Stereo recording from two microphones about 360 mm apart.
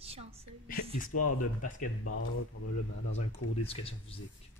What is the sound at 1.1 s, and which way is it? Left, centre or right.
Speech, left.